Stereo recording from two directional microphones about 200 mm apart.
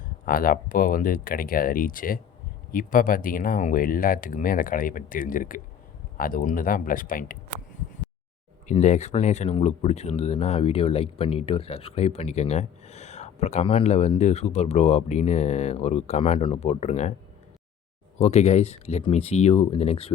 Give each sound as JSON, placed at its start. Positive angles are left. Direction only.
{"t": 0.3, "sound": "speech", "side_deg": 45}
{"t": 8.6, "sound": "speech", "side_deg": 35}
{"t": 18.2, "sound": "speech", "side_deg": 35}